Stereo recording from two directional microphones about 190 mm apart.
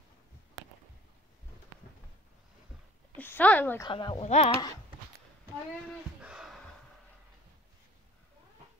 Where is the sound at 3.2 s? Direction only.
10° left (ahead or behind).